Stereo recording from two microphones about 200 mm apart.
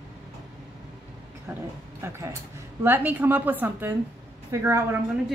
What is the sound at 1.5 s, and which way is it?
A woman's voice, 10° right (ahead or behind).